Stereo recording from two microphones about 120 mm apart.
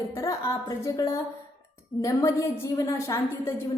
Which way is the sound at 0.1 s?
25° left (ahead or behind).